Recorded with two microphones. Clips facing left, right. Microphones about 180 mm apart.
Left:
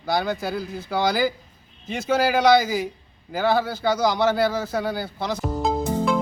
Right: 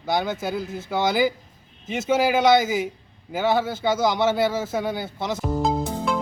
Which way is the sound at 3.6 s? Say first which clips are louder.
Even; 25° right (ahead or behind).